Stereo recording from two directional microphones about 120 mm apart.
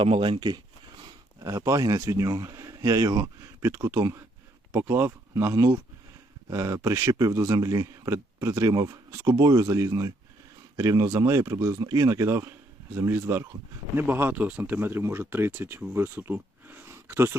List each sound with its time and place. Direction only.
0.0 s speech: 45° right (ahead or behind)
1.0 s a man's voice: 30° right (ahead or behind)